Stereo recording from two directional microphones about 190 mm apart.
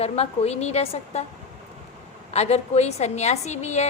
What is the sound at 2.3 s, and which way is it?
A woman's voice, 35° left (ahead or behind).